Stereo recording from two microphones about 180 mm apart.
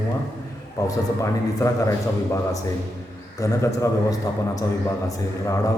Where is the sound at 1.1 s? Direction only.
15° left (ahead or behind).